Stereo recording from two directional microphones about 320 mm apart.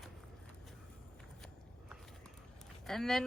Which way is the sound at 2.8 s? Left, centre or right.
Centre.